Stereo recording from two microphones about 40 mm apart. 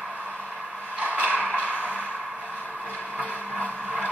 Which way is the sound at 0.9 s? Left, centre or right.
Right.